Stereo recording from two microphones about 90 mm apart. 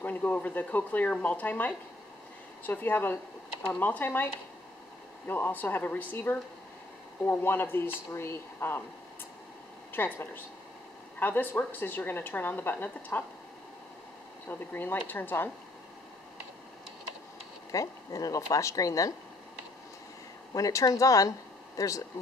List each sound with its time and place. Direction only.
0.0 s a woman's voice: 20° left (ahead or behind)
9.9 s a woman's voice: 20° left (ahead or behind)
14.5 s a woman's voice: 20° left (ahead or behind)
17.6 s speech: 40° left (ahead or behind)
20.5 s speech: 40° left (ahead or behind)